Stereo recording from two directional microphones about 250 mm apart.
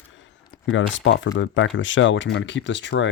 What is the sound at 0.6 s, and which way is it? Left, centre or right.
Speech, left.